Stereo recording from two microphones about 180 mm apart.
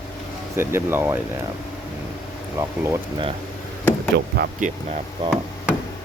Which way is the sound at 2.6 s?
15° right (ahead or behind).